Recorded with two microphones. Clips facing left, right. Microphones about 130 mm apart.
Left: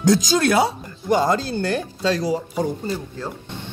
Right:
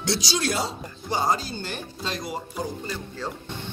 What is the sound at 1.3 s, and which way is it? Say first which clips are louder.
Speech: left 6 dB; 90° left.